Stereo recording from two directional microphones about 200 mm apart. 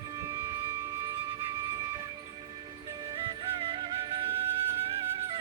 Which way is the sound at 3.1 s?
25° right (ahead or behind).